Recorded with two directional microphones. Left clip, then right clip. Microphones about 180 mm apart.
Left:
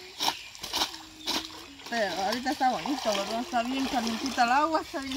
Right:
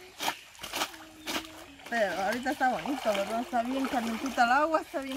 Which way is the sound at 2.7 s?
15° right (ahead or behind).